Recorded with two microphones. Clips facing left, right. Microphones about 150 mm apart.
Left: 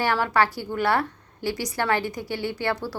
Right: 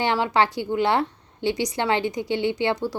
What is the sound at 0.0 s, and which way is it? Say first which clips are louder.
A woman's voice: right 1 dB; 20° right (ahead or behind).